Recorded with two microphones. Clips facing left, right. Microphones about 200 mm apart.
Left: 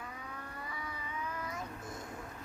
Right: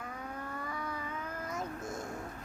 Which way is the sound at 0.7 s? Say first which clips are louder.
Right 5 dB; 45° right (ahead or behind).